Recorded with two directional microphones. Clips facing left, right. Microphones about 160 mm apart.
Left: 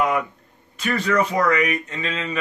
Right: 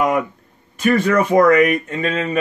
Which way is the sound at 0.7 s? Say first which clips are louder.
Right 5 dB; 50° right (ahead or behind).